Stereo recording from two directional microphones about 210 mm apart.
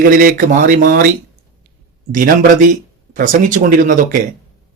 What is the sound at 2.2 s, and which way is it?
A man's voice, 40° right (ahead or behind).